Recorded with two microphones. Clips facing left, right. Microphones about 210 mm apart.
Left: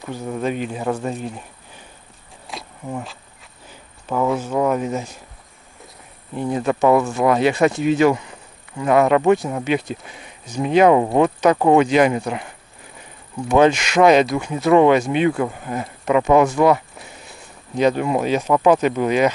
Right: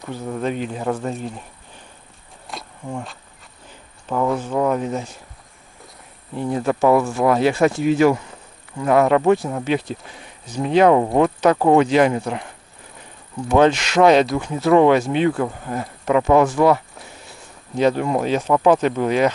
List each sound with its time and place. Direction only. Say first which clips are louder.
0.1 s speech: left 1 dB; 10° left (ahead or behind)
2.4 s insect: left 1 dB; centre (ahead or behind)
4.1 s speech: left 1 dB; 5° left (ahead or behind)
6.6 s speech: even; centre (ahead or behind)
7.3 s speech: even; 15° left (ahead or behind)
8.7 s speech: even; 5° left (ahead or behind)
11.8 s speech: even; 10° left (ahead or behind)
13.5 s speech: even; 10° left (ahead or behind)